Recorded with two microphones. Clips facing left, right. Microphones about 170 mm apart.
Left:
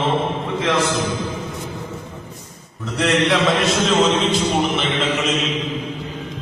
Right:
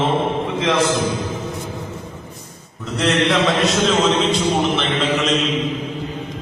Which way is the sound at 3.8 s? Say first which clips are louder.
Even; centre (ahead or behind).